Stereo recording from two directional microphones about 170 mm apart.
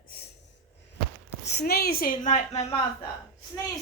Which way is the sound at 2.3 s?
40° left (ahead or behind).